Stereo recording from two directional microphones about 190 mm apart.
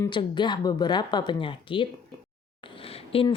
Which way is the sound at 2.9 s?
30° left (ahead or behind).